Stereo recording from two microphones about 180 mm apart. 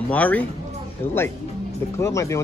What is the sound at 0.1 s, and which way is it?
Speech, 10° left (ahead or behind).